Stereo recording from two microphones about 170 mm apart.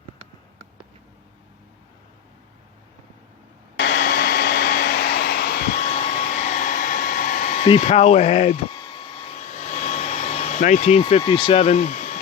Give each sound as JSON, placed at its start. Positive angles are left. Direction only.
{"t": 3.8, "sound": "vacuum cleaner", "side_deg": 75}
{"t": 5.9, "sound": "hair dryer", "side_deg": 40}
{"t": 7.7, "sound": "speech", "side_deg": 40}
{"t": 8.7, "sound": "a sound", "side_deg": 25}
{"t": 11.3, "sound": "speech", "side_deg": 30}